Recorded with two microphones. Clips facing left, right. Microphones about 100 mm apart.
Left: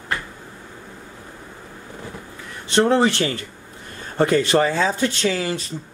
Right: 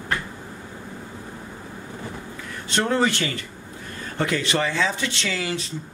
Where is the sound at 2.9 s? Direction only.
30° left (ahead or behind).